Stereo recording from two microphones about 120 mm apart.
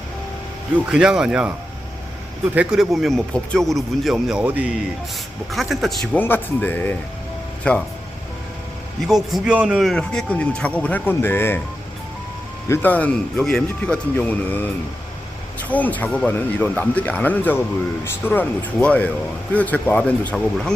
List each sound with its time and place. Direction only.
0.9 s speech: 5° right (ahead or behind)
2.6 s speech: 5° right (ahead or behind)
5.5 s speech: centre (ahead or behind)
6.1 s speech: 15° left (ahead or behind)
9.0 s speech: 5° right (ahead or behind)
9.9 s speech: 5° left (ahead or behind)
12.6 s speech: 20° left (ahead or behind)